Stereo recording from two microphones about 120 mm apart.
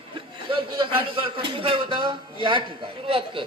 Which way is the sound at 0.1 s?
45° right (ahead or behind).